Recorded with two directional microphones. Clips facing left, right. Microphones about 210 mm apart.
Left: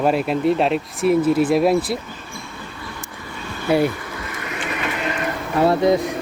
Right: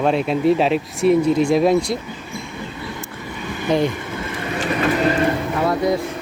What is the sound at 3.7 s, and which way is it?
Speech, 10° left (ahead or behind).